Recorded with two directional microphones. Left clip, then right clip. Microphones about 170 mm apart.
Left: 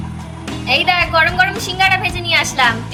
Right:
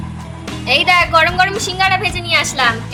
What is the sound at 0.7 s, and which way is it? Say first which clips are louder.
A woman's voice: right 2 dB; 55° right (ahead or behind).